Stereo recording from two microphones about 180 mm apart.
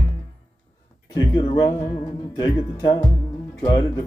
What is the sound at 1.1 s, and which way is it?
Music, 25° left (ahead or behind).